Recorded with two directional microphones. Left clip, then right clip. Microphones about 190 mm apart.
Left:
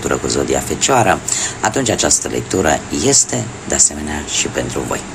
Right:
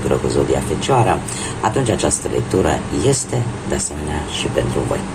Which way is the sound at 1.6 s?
30° left (ahead or behind).